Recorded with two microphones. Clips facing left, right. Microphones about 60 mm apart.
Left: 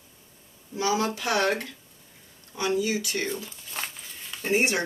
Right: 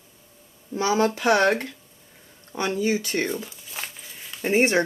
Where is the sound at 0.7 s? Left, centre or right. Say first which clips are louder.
Right 4 dB; right.